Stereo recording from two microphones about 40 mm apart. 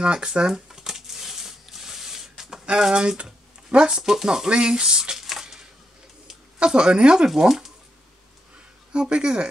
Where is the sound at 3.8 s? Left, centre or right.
Centre.